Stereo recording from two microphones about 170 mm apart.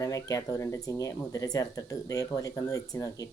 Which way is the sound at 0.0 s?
20° left (ahead or behind).